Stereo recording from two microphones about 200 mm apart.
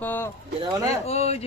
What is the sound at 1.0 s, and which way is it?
Speech, 30° left (ahead or behind).